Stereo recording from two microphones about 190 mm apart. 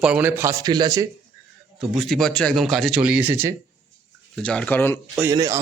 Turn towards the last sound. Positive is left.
turn(degrees=-20)  # may be behind; listen again after turning